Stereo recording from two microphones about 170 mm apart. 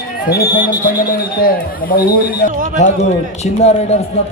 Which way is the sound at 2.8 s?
40° left (ahead or behind).